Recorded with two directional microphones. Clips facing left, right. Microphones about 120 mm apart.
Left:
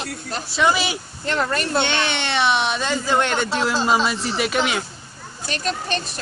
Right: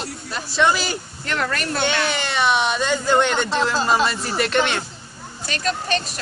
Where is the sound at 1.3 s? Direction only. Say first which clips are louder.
Left 2 dB; 30° left (ahead or behind).